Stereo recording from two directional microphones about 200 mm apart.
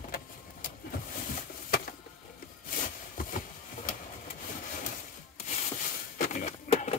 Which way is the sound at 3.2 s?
40° left (ahead or behind).